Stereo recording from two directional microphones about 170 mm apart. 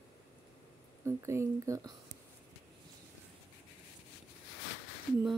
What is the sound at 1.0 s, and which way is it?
Speech, 15° right (ahead or behind).